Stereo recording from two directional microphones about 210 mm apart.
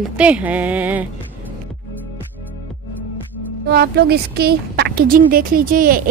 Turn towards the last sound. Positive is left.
turn(degrees=-40)  # may be behind; listen again after turning